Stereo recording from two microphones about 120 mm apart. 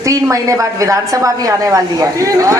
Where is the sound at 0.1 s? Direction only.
25° right (ahead or behind).